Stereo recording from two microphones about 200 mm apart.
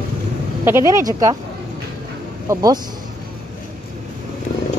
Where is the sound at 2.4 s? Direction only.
20° right (ahead or behind).